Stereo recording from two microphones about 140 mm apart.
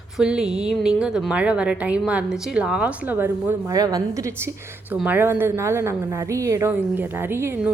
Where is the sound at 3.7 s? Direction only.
25° right (ahead or behind).